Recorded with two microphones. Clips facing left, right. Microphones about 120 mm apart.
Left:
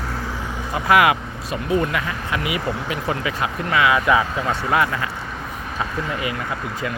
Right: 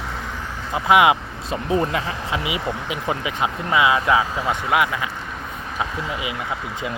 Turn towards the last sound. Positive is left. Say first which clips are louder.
# left 1 dB
turn(degrees=-15)  # may be behind; listen again after turning